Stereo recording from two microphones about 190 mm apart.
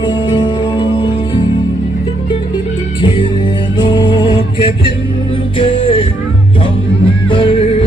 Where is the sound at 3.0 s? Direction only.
25° left (ahead or behind).